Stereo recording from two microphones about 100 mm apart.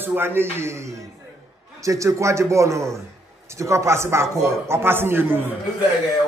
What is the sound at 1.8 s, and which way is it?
A man's voice, 30° right (ahead or behind).